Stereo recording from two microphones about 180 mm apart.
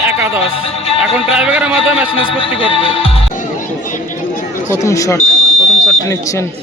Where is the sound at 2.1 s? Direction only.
30° left (ahead or behind).